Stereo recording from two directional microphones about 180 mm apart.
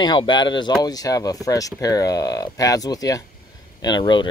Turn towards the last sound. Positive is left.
turn(degrees=25)  # may be behind; listen again after turning